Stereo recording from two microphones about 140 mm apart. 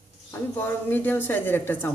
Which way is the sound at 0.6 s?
15° left (ahead or behind).